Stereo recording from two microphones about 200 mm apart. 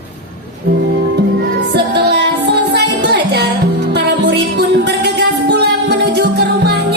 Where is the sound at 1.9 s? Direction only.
60° right (ahead or behind).